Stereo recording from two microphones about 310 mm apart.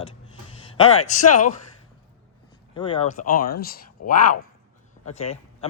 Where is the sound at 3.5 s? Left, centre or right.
Left.